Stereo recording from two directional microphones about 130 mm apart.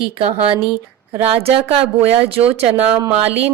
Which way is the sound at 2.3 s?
50° right (ahead or behind).